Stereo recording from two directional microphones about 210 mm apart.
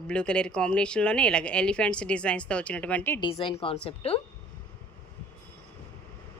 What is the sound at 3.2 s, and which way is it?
Speech, 25° left (ahead or behind).